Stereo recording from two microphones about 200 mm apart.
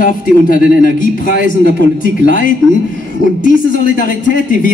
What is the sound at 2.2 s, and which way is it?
A man's voice, 45° left (ahead or behind).